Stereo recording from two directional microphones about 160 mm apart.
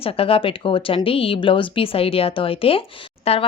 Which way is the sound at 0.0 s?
35° left (ahead or behind).